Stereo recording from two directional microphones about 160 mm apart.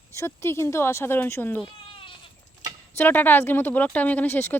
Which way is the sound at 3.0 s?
10° left (ahead or behind).